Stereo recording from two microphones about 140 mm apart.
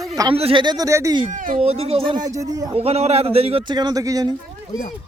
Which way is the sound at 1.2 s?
70° right (ahead or behind).